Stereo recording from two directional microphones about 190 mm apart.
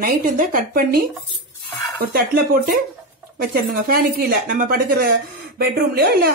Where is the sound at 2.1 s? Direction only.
50° right (ahead or behind).